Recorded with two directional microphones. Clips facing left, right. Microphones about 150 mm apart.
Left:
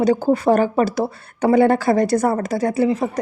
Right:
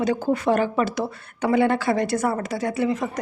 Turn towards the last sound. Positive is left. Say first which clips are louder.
# left 5 dB
turn(degrees=35)  # may be behind; listen again after turning